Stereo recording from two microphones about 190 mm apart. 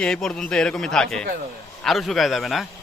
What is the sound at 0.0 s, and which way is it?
Speech, 5° left (ahead or behind).